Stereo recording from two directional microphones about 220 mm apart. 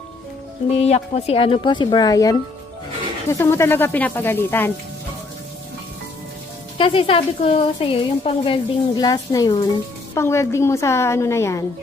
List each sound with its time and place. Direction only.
0.7 s a woman's voice: 30° left (ahead or behind); by 4.7 s 10° left (ahead or behind)
6.8 s a woman's voice: 25° left (ahead or behind)